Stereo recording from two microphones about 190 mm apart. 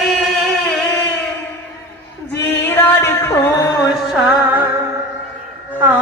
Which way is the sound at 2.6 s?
10° left (ahead or behind).